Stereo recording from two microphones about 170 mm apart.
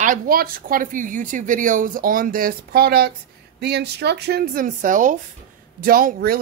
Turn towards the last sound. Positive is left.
turn(degrees=-60)  # may be behind; listen again after turning